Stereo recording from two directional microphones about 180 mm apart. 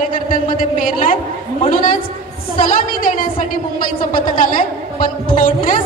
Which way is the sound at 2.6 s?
50° left (ahead or behind).